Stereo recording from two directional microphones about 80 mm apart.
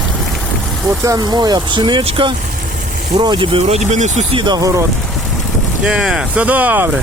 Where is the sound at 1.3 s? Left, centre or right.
Right.